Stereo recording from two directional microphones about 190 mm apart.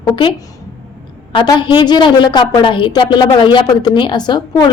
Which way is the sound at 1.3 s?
20° left (ahead or behind).